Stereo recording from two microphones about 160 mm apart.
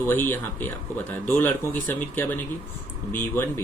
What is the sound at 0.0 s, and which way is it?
Speech, 10° left (ahead or behind).